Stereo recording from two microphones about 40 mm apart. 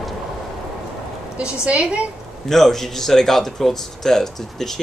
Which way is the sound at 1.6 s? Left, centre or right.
Right.